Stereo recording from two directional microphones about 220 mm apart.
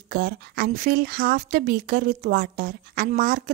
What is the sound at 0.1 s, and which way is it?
A woman's voice, 45° right (ahead or behind).